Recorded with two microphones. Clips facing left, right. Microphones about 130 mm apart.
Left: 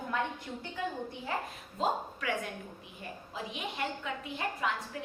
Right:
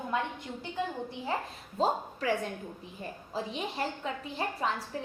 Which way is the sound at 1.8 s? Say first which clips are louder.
Right 3 dB; 35° right (ahead or behind).